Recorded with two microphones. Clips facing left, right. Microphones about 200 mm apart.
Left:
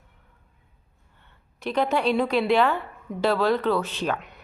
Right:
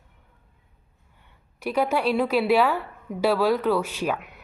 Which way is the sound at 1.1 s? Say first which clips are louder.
Even; 10° right (ahead or behind).